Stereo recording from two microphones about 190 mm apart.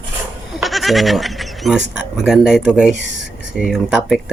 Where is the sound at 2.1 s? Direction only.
5° right (ahead or behind).